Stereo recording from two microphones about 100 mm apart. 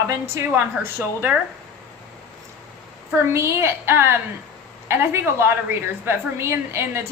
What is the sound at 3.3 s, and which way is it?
A man's voice, 25° right (ahead or behind).